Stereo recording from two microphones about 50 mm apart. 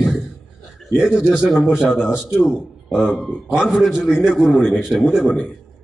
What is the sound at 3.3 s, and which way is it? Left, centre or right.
A man's voice, centre.